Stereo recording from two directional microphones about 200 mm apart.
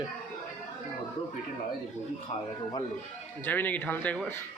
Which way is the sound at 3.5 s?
10° left (ahead or behind).